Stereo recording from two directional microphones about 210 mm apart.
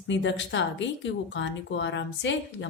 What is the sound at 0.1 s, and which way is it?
Speech, 60° left (ahead or behind).